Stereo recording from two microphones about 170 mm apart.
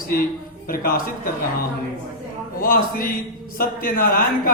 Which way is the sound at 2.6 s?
55° left (ahead or behind).